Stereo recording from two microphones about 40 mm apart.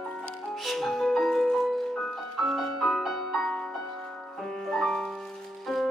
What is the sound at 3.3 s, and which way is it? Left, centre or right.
Music, centre.